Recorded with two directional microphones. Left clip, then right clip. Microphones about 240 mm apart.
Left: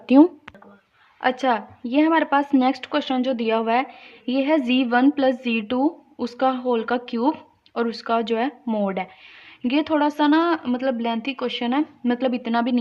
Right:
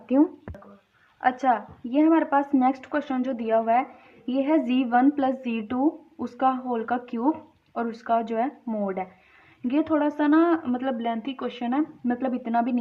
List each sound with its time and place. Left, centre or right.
0.0 s speech: left
1.2 s a woman's voice: left
9.6 s a woman's voice: left